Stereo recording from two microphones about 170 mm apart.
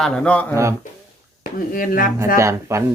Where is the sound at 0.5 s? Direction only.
15° right (ahead or behind).